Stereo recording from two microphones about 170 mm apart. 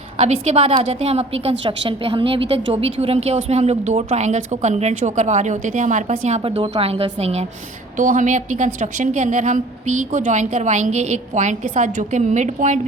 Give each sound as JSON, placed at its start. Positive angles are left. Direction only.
{"t": 0.2, "sound": "a woman's voice", "side_deg": -40}
{"t": 7.9, "sound": "a woman's voice", "side_deg": -50}